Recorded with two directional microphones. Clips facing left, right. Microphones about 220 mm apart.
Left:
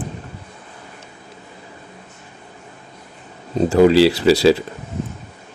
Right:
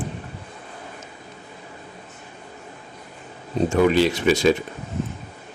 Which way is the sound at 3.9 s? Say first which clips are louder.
Left 6 dB; 90° left.